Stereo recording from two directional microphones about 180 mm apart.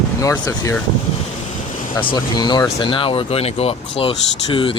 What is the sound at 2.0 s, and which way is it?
Speech, 25° left (ahead or behind).